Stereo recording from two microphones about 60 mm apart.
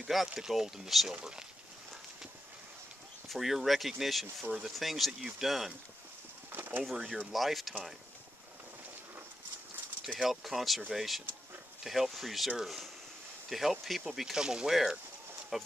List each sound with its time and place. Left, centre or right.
0.0 s speech: centre
3.3 s speech: centre
6.5 s pigeon: right
6.8 s speech: centre
10.1 s speech: centre